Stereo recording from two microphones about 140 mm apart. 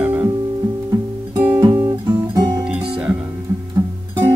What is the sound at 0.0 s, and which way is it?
Music, 15° right (ahead or behind).